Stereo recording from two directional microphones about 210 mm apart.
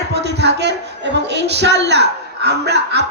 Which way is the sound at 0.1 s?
55° right (ahead or behind).